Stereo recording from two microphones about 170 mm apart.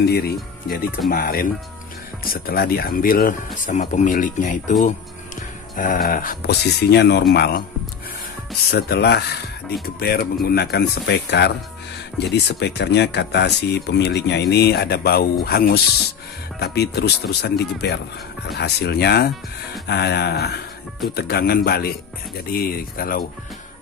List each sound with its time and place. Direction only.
0.0 s speech: 70° left (ahead or behind); by 4.7 s 50° left (ahead or behind)
5.8 s speech: 55° left (ahead or behind)
8.6 s speech: 70° left (ahead or behind)